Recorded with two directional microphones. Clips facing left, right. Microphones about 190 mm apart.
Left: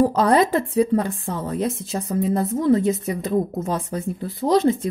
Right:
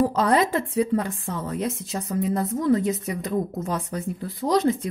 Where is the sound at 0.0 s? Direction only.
40° left (ahead or behind).